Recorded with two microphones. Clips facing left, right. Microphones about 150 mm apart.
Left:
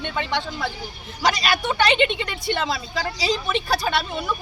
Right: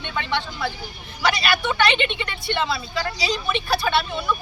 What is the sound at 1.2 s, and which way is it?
Speech, 35° left (ahead or behind).